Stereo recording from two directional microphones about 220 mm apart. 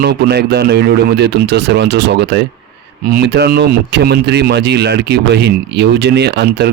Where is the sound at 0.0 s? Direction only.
45° right (ahead or behind).